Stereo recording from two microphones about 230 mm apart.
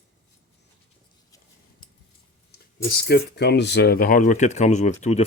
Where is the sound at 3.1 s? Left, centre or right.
Left.